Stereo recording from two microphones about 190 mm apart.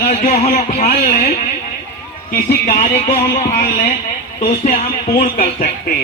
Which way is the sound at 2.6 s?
40° left (ahead or behind).